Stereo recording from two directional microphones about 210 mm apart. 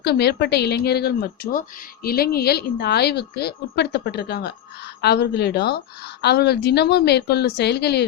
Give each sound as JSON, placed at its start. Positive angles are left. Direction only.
{"t": 0.0, "sound": "speech", "side_deg": 50}